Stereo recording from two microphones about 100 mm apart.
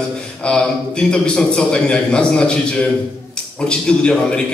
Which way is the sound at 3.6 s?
10° left (ahead or behind).